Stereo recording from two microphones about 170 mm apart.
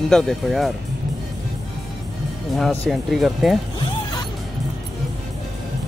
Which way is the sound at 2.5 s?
Centre (ahead or behind).